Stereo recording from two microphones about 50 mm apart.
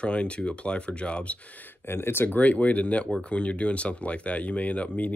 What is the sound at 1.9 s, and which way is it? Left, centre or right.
Speech, left.